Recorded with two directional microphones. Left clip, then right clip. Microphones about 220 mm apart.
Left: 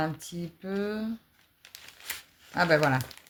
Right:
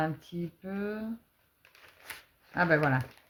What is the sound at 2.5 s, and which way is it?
Speech, 30° left (ahead or behind).